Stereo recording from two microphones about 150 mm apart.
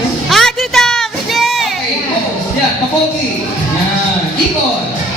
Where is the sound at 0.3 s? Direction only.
Centre (ahead or behind).